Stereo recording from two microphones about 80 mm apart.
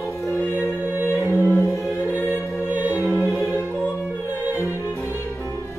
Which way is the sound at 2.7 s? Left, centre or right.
Right.